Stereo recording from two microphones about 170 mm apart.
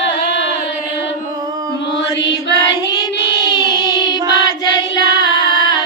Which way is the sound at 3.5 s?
25° left (ahead or behind).